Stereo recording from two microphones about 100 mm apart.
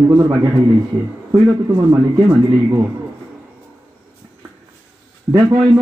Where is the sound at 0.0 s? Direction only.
30° right (ahead or behind).